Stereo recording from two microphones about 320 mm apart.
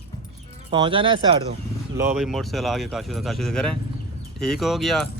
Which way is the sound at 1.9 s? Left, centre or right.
Centre.